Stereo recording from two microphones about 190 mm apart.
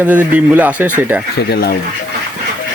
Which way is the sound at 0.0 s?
10° right (ahead or behind).